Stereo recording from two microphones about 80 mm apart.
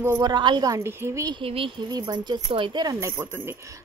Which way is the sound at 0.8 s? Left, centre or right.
Right.